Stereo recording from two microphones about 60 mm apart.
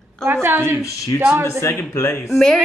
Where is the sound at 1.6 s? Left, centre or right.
Left.